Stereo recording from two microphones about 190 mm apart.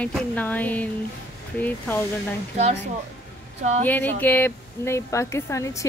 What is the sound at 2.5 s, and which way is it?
Speech, 35° right (ahead or behind).